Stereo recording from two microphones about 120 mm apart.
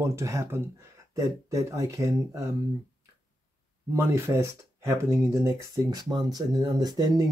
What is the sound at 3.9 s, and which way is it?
Speech, 25° right (ahead or behind).